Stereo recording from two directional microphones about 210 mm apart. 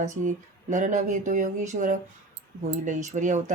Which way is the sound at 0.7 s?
35° right (ahead or behind).